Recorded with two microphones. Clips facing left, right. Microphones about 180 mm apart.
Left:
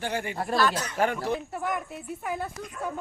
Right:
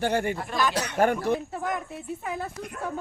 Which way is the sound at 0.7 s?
70° right (ahead or behind).